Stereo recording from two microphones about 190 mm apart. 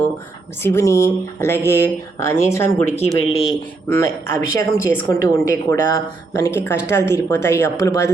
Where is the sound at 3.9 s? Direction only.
15° left (ahead or behind).